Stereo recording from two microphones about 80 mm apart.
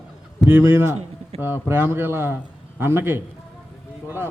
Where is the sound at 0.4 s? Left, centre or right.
Right.